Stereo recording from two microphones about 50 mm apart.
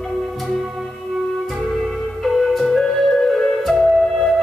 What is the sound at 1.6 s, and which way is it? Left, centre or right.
Music, centre.